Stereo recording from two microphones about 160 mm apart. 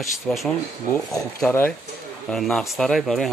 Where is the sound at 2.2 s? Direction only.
5° left (ahead or behind).